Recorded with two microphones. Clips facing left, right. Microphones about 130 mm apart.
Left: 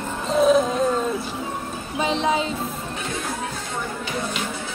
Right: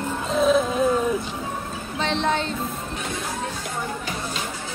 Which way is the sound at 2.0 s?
5° left (ahead or behind).